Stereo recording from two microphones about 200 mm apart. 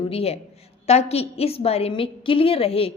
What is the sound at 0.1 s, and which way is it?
A woman's voice, 30° left (ahead or behind).